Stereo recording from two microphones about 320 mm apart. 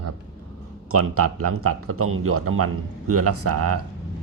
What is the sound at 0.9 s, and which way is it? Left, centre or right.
A man's voice, right.